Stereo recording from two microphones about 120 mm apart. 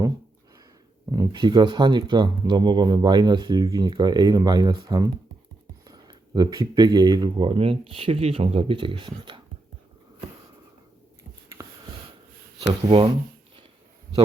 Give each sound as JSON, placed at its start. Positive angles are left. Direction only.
{"t": 1.1, "sound": "speech", "side_deg": -30}
{"t": 1.4, "sound": "speech", "side_deg": -40}
{"t": 11.6, "sound": "a sound", "side_deg": -30}
{"t": 12.5, "sound": "speech", "side_deg": -50}